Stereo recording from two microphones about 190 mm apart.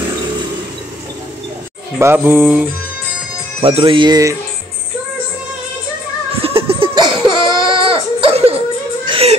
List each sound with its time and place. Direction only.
2.0 s music: 10° right (ahead or behind)
3.6 s speech: 30° right (ahead or behind)
6.4 s laughter: 30° right (ahead or behind)
7.6 s baby cry: 25° right (ahead or behind)
9.0 s whimper: 25° right (ahead or behind)